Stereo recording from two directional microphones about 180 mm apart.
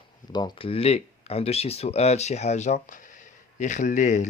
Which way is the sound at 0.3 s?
25° left (ahead or behind).